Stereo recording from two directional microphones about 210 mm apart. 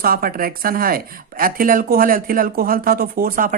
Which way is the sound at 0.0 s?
45° right (ahead or behind).